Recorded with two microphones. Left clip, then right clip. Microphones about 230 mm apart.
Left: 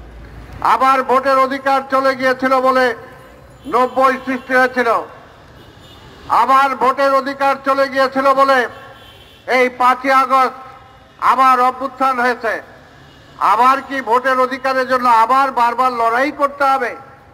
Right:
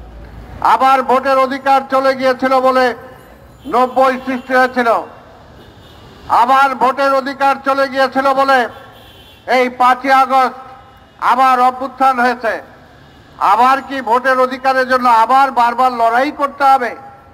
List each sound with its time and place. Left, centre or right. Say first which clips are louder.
0.6 s a man's voice: right 2 dB; right
6.2 s a man's voice: right 2 dB; right